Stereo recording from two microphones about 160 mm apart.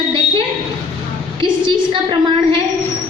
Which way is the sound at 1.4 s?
30° right (ahead or behind).